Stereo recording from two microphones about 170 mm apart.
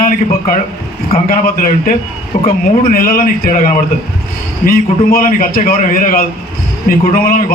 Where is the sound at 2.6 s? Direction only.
55° left (ahead or behind).